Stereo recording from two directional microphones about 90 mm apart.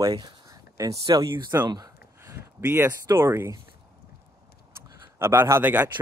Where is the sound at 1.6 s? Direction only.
50° right (ahead or behind).